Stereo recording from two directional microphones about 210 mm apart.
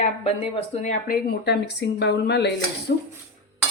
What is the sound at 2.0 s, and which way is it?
Speech, 55° left (ahead or behind).